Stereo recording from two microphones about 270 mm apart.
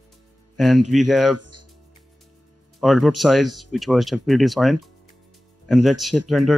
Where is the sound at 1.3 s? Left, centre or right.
Right.